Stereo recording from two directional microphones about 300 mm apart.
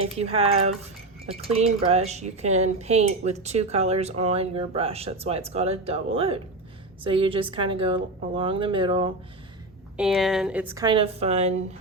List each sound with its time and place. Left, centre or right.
0.0 s a woman's voice: centre
10.0 s a woman's voice: centre; by 11.6 s right